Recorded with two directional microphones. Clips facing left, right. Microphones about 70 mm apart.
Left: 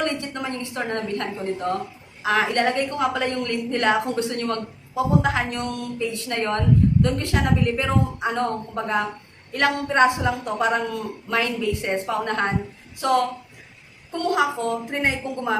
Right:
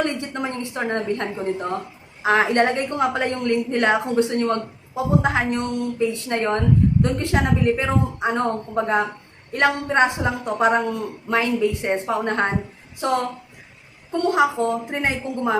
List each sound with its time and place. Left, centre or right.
0.0 s a woman's voice: right
14.1 s a woman's voice: centre